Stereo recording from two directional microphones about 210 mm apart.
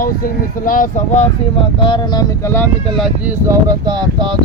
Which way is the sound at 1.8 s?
20° left (ahead or behind).